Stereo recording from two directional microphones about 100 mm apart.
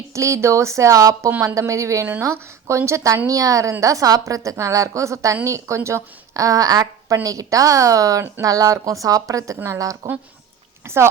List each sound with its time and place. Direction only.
0.1 s a woman's voice: 30° right (ahead or behind)